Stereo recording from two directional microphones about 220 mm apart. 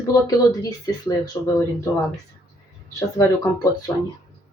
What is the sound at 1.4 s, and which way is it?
Speech, 20° left (ahead or behind).